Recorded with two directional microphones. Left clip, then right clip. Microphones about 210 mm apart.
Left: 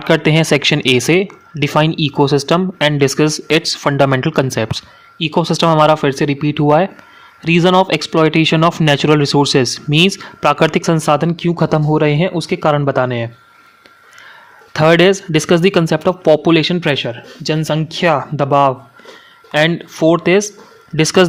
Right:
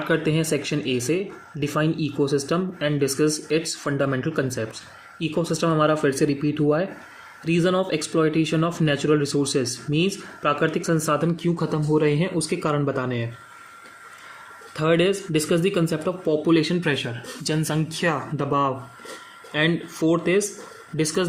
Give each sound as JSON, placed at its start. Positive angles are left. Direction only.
{"t": 0.1, "sound": "speech", "side_deg": 45}
{"t": 14.7, "sound": "speech", "side_deg": 50}